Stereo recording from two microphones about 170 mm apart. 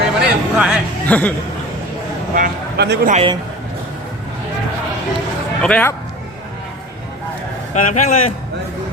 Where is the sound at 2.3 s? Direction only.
55° right (ahead or behind).